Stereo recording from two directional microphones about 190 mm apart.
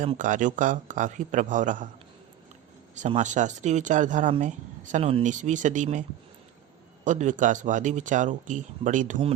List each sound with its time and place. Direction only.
0.2 s a man's voice: 45° right (ahead or behind)
2.9 s speech: 40° right (ahead or behind)